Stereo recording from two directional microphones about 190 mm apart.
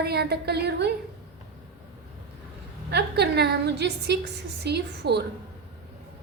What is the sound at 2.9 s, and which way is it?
A woman's voice, 60° right (ahead or behind).